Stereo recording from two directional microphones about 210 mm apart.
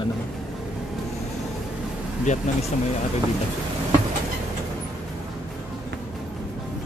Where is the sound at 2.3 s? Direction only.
35° left (ahead or behind).